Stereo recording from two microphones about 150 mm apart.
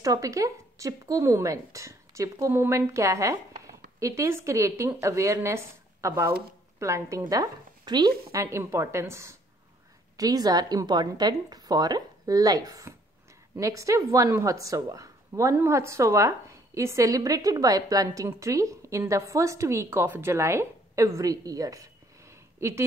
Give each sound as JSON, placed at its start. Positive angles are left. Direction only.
{"t": 0.0, "sound": "a woman's voice", "side_deg": -20}